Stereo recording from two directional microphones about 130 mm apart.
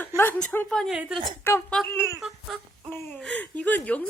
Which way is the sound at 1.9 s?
15° left (ahead or behind).